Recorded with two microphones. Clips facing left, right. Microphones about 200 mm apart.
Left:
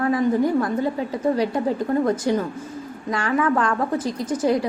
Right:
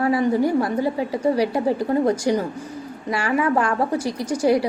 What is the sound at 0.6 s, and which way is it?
A woman's voice, 15° right (ahead or behind).